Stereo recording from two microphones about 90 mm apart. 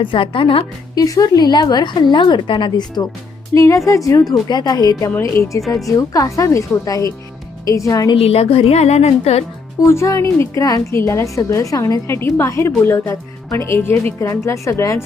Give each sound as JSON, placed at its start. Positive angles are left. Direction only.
{"t": 0.0, "sound": "a woman's voice", "side_deg": 70}
{"t": 0.9, "sound": "a woman's voice", "side_deg": 40}
{"t": 3.5, "sound": "a woman's voice", "side_deg": 35}
{"t": 8.1, "sound": "a woman's voice", "side_deg": 90}
{"t": 9.8, "sound": "a woman's voice", "side_deg": 35}
{"t": 12.0, "sound": "a woman's voice", "side_deg": 25}